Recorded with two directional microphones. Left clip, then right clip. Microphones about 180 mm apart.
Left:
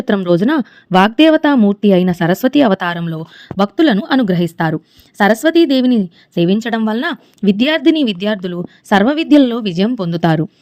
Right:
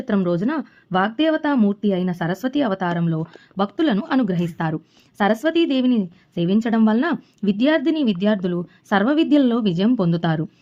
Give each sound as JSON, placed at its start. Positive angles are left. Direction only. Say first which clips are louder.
{"t": 0.3, "sound": "a woman's voice", "louder": "left 9 dB", "side_deg": 40}